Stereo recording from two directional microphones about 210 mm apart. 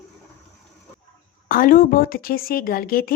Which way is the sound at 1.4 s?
40° left (ahead or behind).